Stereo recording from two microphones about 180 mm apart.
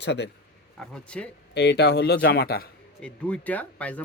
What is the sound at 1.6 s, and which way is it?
Speech, 70° left (ahead or behind).